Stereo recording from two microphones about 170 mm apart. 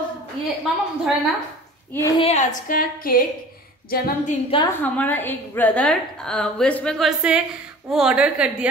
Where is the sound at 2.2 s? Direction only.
40° left (ahead or behind); by 4.3 s 60° left (ahead or behind).